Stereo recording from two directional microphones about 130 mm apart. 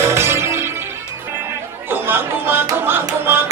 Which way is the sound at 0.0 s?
20° right (ahead or behind).